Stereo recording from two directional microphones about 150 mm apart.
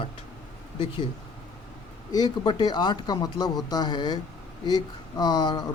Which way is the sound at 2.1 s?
30° left (ahead or behind).